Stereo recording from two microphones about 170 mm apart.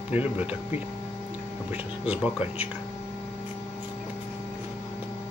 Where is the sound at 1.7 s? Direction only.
10° right (ahead or behind).